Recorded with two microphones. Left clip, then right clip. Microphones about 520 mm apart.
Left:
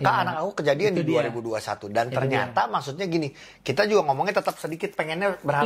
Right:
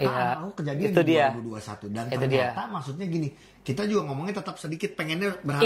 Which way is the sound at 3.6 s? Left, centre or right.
Left.